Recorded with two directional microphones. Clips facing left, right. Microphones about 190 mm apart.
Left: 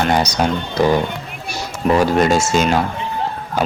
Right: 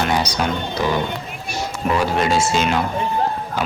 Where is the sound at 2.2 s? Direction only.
45° left (ahead or behind).